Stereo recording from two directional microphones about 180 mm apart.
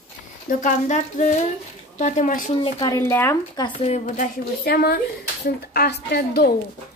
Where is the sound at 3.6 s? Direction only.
30° left (ahead or behind).